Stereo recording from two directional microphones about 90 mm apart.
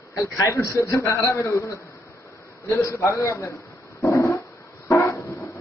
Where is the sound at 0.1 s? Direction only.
40° left (ahead or behind).